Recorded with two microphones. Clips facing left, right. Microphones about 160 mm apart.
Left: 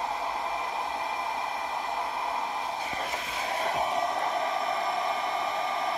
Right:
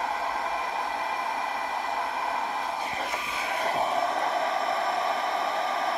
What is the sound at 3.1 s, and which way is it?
Vehicle, 40° left (ahead or behind).